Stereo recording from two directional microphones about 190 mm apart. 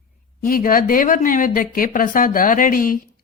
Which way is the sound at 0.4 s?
50° left (ahead or behind).